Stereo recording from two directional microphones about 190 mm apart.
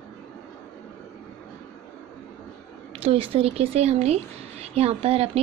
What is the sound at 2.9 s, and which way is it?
Speech, 30° right (ahead or behind).